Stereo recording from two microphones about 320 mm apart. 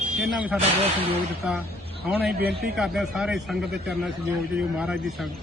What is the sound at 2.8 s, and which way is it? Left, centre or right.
A man's voice, centre.